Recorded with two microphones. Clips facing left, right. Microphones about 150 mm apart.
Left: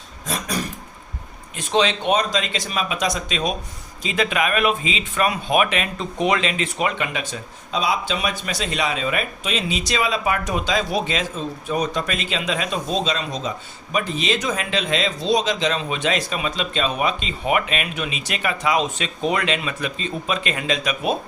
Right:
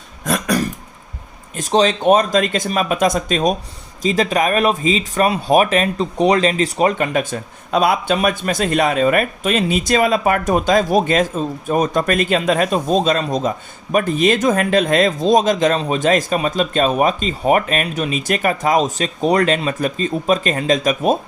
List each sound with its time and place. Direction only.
0.3 s cough: 70° right (ahead or behind)
1.5 s speech: 40° right (ahead or behind)